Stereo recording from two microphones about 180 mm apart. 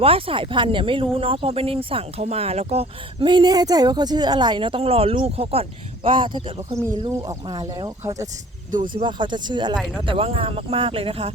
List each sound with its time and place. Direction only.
0.0 s speech: 30° right (ahead or behind)
9.7 s speech: centre (ahead or behind)
10.1 s speech: 30° right (ahead or behind)